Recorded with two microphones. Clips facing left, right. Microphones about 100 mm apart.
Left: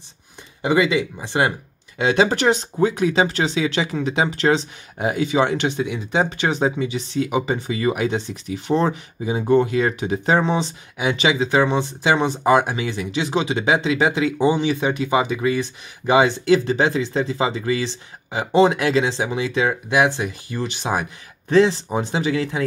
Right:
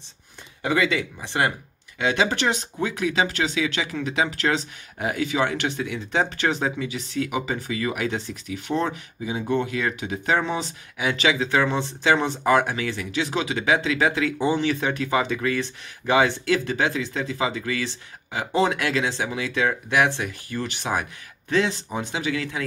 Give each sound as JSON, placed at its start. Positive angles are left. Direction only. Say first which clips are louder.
{"t": 0.6, "sound": "speech", "louder": "left 5 dB", "side_deg": 15}
{"t": 2.0, "sound": "speech", "louder": "left 5 dB", "side_deg": 35}
{"t": 21.5, "sound": "speech", "louder": "left 7 dB", "side_deg": 35}